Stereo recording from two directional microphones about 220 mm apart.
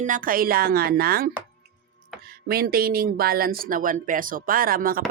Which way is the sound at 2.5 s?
45° right (ahead or behind).